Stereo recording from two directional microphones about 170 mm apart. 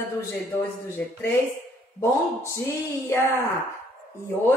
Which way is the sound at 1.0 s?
10° left (ahead or behind).